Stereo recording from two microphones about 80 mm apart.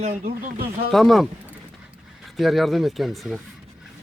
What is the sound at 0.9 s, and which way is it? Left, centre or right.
Speech, centre.